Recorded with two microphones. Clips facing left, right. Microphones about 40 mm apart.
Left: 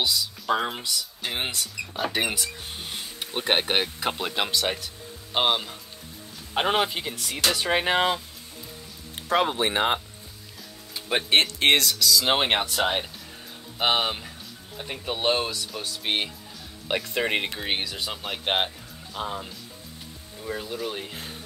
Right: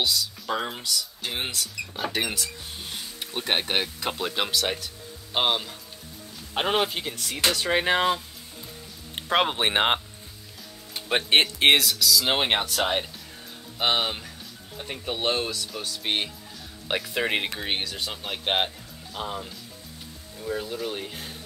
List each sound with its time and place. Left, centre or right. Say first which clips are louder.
0.0 s speech: even; centre
9.3 s speech: even; right
10.9 s music: right 1 dB; right
11.4 s speech: right 1 dB; centre